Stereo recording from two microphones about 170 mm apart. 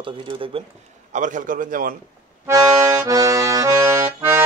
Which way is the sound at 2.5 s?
20° right (ahead or behind).